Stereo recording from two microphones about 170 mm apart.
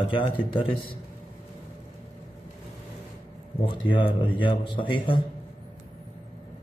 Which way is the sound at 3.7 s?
30° left (ahead or behind).